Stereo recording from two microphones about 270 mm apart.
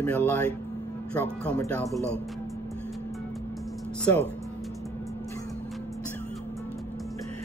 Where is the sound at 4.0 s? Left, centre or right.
Centre.